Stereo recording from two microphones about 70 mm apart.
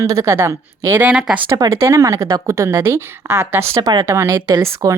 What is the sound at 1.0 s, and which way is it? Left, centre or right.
Speech, centre.